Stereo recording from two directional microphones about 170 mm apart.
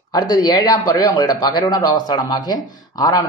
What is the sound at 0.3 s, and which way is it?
Speech, 20° left (ahead or behind).